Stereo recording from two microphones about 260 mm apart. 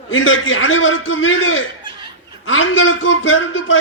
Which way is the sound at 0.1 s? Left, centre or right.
Left.